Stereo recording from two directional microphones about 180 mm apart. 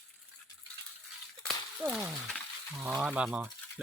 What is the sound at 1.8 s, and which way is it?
Speech, centre (ahead or behind).